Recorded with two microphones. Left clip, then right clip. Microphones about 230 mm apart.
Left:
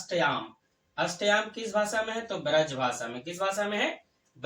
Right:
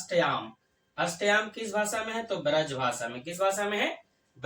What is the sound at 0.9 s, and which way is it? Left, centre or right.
Speech, centre.